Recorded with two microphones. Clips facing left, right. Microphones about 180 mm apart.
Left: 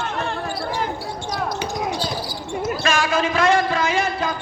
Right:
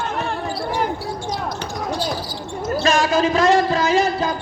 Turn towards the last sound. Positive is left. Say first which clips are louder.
# right 3 dB
turn(degrees=-35)  # may be behind; listen again after turning